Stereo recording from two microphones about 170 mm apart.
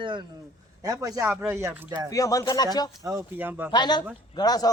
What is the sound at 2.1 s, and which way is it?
Speech, 20° left (ahead or behind).